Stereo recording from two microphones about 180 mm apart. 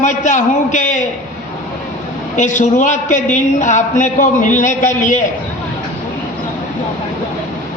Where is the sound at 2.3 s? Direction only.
45° left (ahead or behind).